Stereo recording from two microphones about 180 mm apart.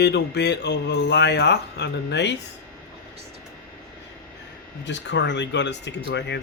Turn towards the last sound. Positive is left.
turn(degrees=75)  # may be behind; listen again after turning